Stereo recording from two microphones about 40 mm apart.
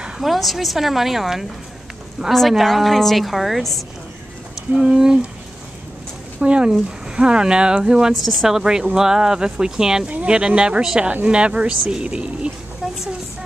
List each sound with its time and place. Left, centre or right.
0.2 s a woman's voice: centre
4.7 s speech: centre
6.4 s speech: right
10.0 s speech: right
12.8 s a sound: centre